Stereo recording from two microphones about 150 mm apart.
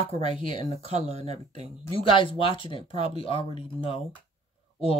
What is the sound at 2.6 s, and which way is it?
Speech, 35° left (ahead or behind).